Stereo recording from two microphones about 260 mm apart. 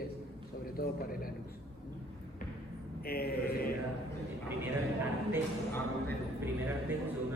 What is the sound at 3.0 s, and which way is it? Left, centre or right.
Speech, left.